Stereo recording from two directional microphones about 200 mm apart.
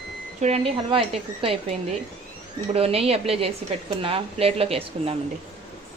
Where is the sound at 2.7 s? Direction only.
30° right (ahead or behind).